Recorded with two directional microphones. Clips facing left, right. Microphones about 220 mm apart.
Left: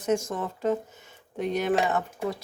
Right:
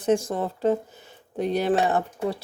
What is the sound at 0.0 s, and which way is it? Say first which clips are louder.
Speech: right 4 dB; 35° right (ahead or behind).